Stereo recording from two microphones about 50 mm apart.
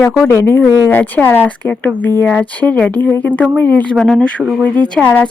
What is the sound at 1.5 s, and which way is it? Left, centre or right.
Speech, left.